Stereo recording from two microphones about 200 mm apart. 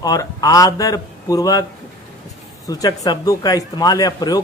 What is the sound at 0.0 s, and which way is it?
Speech, 20° left (ahead or behind).